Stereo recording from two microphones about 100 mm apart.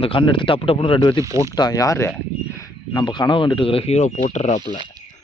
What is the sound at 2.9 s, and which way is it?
Speech, 45° left (ahead or behind).